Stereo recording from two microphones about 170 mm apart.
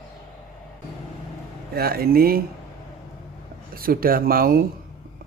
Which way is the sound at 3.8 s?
60° right (ahead or behind).